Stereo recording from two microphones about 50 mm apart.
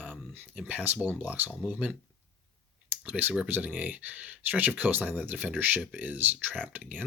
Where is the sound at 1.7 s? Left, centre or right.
Right.